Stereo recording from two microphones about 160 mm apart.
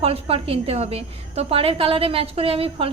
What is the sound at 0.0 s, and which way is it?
A woman's voice, 35° right (ahead or behind).